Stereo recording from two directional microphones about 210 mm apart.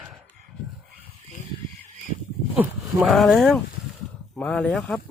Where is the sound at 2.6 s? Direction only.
Centre (ahead or behind).